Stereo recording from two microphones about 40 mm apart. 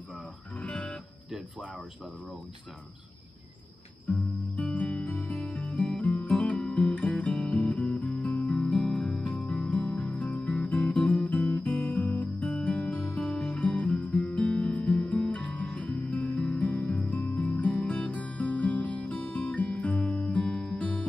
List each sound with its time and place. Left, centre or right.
0.7 s music: left
4.1 s music: left